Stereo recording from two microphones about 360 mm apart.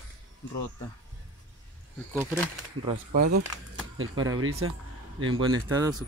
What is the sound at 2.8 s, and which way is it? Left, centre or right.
Speech, right.